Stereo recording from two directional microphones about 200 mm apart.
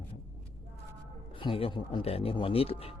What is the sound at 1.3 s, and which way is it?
Speech, 25° left (ahead or behind).